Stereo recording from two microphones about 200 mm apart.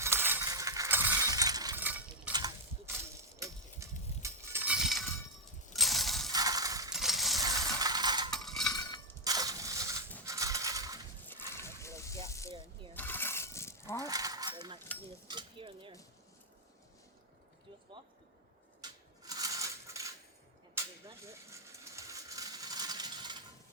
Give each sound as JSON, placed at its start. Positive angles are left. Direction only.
{"t": 0.0, "sound": "coin", "side_deg": -10}
{"t": 2.3, "sound": "a sound", "side_deg": -20}
{"t": 5.7, "sound": "coin", "side_deg": 0}
{"t": 6.3, "sound": "coin", "side_deg": -20}
{"t": 6.9, "sound": "coin", "side_deg": 0}
{"t": 7.6, "sound": "mechanisms", "side_deg": -20}
{"t": 8.3, "sound": "a sound", "side_deg": 0}
{"t": 8.7, "sound": "clang", "side_deg": 20}
{"t": 9.2, "sound": "crushing", "side_deg": -20}
{"t": 11.5, "sound": "a sound", "side_deg": 15}
{"t": 13.9, "sound": "coin", "side_deg": -15}
{"t": 15.3, "sound": "cutlery", "side_deg": -25}
{"t": 18.8, "sound": "a sound", "side_deg": -20}
{"t": 21.7, "sound": "coin", "side_deg": -15}